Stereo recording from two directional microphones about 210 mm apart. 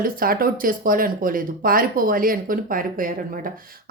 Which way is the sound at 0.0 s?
45° right (ahead or behind).